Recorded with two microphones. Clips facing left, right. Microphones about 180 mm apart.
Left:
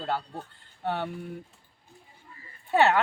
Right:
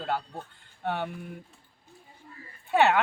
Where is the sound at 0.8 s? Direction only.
Centre (ahead or behind).